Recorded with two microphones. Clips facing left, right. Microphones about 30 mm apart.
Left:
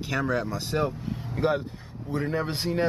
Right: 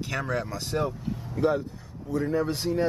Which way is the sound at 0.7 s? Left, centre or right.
Left.